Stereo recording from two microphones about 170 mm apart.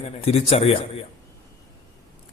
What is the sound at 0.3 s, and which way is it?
Speech, 35° left (ahead or behind).